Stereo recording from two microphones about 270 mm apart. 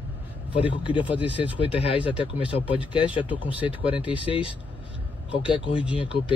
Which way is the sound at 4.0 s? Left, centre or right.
Centre.